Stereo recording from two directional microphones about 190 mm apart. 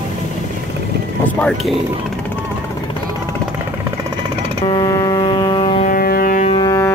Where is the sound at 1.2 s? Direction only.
5° left (ahead or behind).